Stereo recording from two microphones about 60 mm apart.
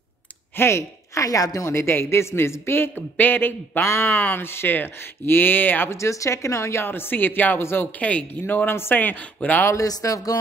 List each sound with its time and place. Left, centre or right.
0.6 s a woman's voice: left
1.7 s a man's voice: left
3.8 s a man's voice: left
5.9 s a woman's voice: left
6.9 s speech: left
8.0 s speech: left
9.8 s speech: left